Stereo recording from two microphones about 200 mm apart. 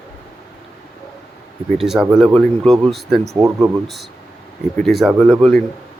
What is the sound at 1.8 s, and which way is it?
Speech, centre (ahead or behind).